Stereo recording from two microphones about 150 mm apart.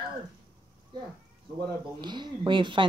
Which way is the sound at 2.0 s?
30° right (ahead or behind).